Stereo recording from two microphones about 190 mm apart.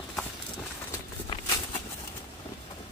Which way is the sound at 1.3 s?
25° left (ahead or behind).